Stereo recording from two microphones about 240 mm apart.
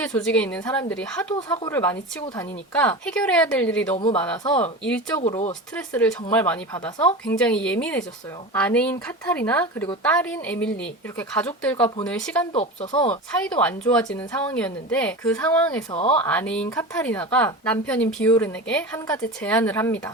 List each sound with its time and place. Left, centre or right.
0.0 s a woman's voice: centre
1.4 s a woman's voice: centre
3.9 s speech: left
4.8 s a woman's voice: centre
12.5 s speech: left
13.4 s a woman's voice: centre
15.9 s speech: left
16.1 s a woman's voice: centre